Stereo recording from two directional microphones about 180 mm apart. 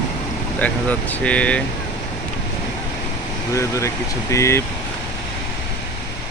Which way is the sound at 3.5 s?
15° left (ahead or behind).